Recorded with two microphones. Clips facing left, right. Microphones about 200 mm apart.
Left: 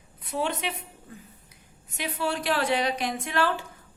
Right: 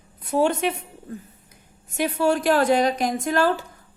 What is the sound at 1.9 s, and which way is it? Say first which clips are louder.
A woman's voice: right 9 dB; 50° right (ahead or behind).